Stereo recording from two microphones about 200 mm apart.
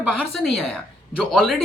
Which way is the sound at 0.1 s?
Centre (ahead or behind).